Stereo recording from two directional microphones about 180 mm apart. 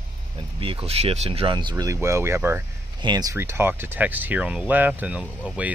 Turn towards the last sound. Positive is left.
turn(degrees=-5)  # may be behind; listen again after turning